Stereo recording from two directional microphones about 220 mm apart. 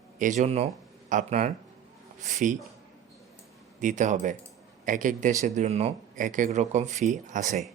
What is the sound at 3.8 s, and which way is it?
Speech, 35° right (ahead or behind).